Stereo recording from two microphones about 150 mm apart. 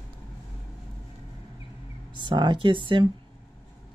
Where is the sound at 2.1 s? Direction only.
30° right (ahead or behind).